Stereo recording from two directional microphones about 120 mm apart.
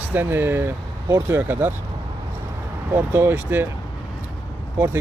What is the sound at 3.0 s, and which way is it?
Speech, 15° right (ahead or behind).